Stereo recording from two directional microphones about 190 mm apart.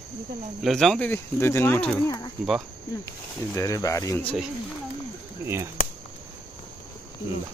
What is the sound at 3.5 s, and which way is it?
Speech, 15° left (ahead or behind).